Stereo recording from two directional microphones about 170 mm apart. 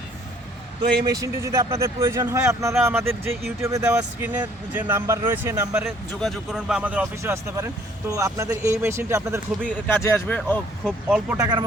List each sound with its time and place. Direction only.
1.0 s speech: 20° right (ahead or behind)
6.2 s speech: centre (ahead or behind); by 9.4 s 15° right (ahead or behind)
9.6 s speech: 10° left (ahead or behind)
11.3 s speech: 25° right (ahead or behind)